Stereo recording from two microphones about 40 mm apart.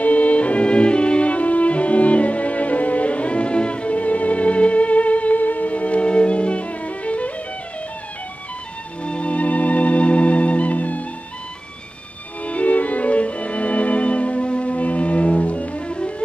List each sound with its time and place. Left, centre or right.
0.0 s music: left
9.0 s music: left
12.4 s violin: left